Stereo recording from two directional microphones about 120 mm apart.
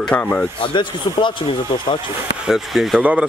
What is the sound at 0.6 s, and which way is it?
Speech, 40° left (ahead or behind).